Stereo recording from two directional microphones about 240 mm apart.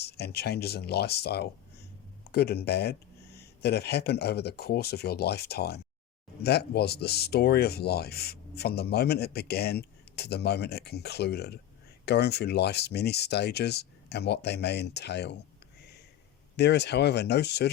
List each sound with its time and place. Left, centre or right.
0.0 s speech: left
16.6 s speech: left